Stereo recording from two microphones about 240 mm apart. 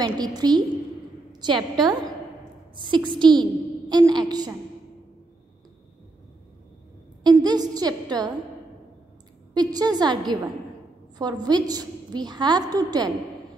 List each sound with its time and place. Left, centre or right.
0.0 s a woman's voice: centre
7.2 s a woman's voice: centre
9.5 s a woman's voice: centre